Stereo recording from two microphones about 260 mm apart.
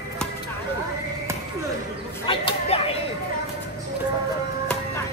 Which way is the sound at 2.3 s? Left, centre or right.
Left.